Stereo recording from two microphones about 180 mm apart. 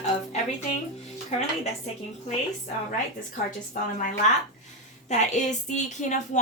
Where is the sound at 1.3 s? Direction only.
40° left (ahead or behind).